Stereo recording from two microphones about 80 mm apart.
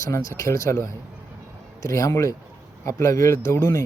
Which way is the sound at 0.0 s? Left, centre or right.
Left.